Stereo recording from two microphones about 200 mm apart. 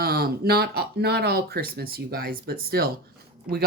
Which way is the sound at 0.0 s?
50° right (ahead or behind).